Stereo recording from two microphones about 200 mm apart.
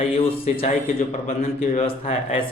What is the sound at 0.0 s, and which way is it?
Speech, 30° left (ahead or behind).